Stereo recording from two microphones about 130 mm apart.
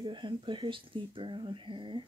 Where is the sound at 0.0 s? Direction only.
40° right (ahead or behind).